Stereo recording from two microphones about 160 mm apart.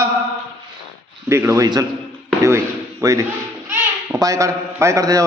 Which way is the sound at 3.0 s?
20° right (ahead or behind).